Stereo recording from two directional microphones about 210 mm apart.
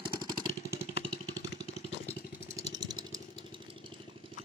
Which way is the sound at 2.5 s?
20° right (ahead or behind).